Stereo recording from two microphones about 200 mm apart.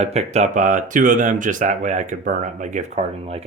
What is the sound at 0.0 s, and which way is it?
Speech, 35° right (ahead or behind).